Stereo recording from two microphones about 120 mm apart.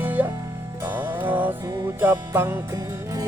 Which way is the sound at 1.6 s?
30° right (ahead or behind).